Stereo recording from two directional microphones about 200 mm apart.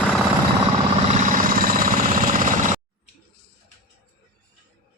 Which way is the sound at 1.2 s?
40° right (ahead or behind).